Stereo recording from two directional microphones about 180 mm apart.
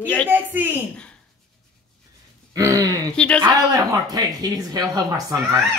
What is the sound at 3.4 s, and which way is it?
Speech, 20° right (ahead or behind).